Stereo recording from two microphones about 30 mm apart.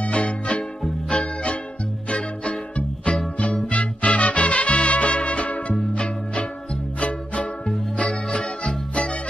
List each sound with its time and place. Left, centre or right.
0.0 s music: left
7.0 s music: left
8.1 s music: left